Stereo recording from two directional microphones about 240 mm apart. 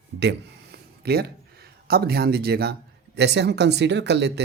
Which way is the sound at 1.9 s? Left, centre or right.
Right.